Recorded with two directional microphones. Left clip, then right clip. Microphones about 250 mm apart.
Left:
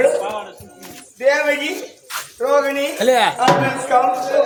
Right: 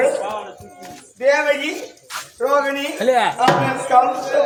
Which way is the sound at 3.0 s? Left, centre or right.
Left.